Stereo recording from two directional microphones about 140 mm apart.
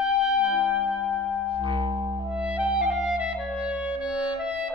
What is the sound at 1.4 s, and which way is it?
Music, 35° right (ahead or behind).